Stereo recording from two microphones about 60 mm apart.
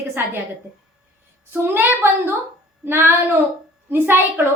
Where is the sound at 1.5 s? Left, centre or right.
Right.